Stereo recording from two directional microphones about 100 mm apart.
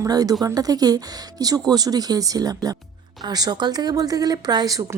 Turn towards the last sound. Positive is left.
turn(degrees=-35)  # may be behind; listen again after turning